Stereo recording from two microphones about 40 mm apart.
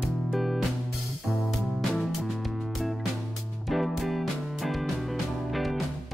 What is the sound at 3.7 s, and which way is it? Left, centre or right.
Music, centre.